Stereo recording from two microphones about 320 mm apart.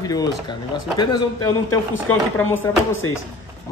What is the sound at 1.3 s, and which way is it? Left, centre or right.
Speech, left.